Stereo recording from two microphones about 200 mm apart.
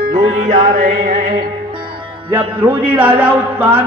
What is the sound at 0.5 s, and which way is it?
Music, 40° right (ahead or behind).